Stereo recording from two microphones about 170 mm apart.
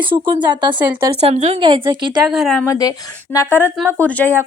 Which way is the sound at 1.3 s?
40° right (ahead or behind).